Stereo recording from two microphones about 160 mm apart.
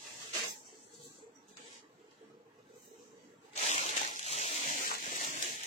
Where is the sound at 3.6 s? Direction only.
45° left (ahead or behind).